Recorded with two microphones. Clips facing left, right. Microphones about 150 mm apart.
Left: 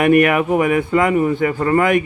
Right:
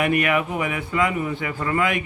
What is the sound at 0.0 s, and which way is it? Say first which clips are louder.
A man's voice: left 8 dB; 50° left (ahead or behind).